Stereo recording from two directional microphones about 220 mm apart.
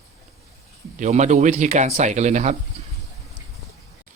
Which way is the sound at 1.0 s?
35° right (ahead or behind).